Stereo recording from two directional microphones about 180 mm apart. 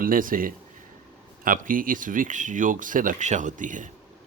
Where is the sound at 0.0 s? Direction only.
50° right (ahead or behind).